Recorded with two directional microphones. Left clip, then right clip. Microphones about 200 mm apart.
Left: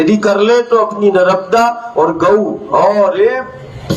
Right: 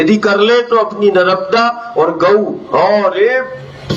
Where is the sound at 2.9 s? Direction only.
60° left (ahead or behind).